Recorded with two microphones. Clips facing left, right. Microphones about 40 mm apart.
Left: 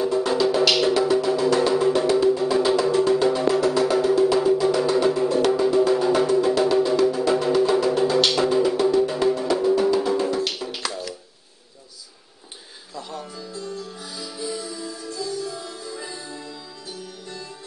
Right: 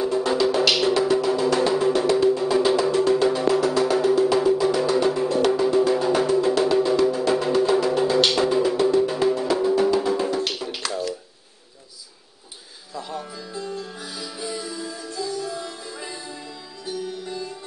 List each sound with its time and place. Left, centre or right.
0.0 s music: centre
12.9 s music: centre
13.5 s music: right
14.8 s music: right